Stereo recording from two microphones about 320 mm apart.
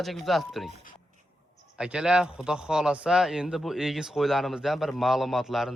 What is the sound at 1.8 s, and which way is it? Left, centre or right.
Speech, centre.